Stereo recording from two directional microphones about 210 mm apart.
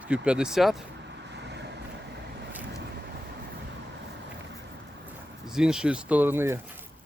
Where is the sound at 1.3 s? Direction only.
55° right (ahead or behind).